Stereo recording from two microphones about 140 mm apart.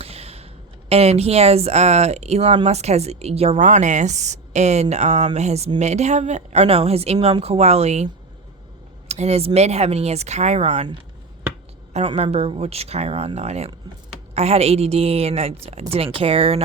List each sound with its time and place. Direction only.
0.0 s speech: 45° right (ahead or behind)
12.0 s speech: 45° right (ahead or behind)